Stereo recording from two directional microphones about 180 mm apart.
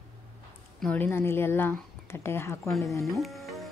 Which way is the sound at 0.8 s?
10° left (ahead or behind).